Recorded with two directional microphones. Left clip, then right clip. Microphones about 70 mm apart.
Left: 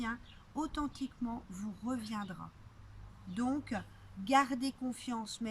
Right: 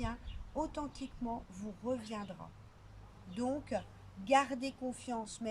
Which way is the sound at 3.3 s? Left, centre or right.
Right.